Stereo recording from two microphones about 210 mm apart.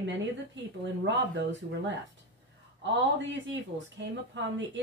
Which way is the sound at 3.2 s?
60° right (ahead or behind).